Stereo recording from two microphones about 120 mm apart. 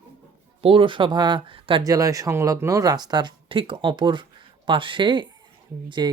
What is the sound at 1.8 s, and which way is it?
Speech, 30° right (ahead or behind).